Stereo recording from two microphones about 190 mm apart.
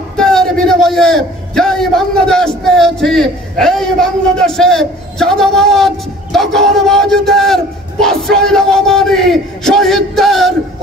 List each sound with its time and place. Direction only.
0.2 s a man's voice: 5° left (ahead or behind)